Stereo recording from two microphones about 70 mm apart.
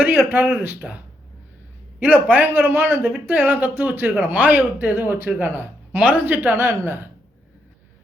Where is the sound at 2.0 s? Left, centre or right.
Right.